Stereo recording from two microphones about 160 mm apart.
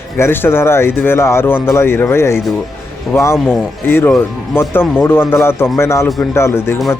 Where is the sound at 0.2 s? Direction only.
15° left (ahead or behind).